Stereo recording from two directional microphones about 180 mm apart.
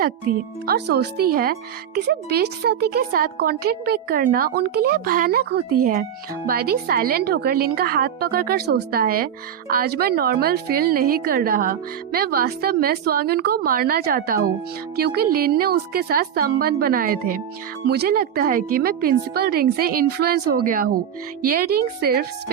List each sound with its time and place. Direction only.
0.0 s a woman's voice: 60° right (ahead or behind)
17.8 s a woman's voice: 65° right (ahead or behind)